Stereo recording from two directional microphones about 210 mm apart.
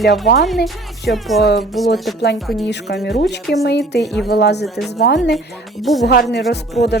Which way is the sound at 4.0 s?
Centre (ahead or behind).